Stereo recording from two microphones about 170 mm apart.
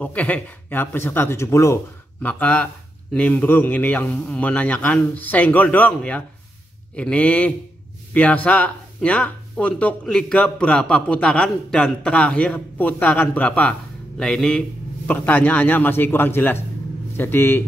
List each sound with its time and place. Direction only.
0.0 s speech: 10° left (ahead or behind)